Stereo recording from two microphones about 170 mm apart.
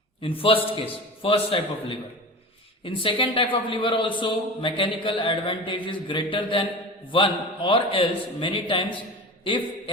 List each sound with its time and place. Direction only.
0.2 s a man's voice: 30° left (ahead or behind)